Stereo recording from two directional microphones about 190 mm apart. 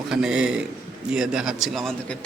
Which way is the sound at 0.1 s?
5° right (ahead or behind).